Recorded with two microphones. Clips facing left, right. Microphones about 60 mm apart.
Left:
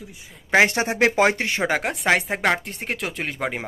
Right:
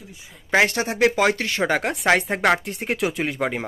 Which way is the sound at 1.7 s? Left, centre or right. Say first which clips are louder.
Right 2 dB; centre.